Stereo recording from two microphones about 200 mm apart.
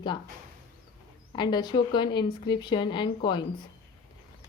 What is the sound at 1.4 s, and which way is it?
A woman's voice, 20° left (ahead or behind).